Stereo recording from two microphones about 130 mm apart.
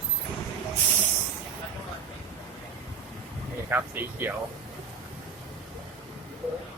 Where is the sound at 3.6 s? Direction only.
15° right (ahead or behind).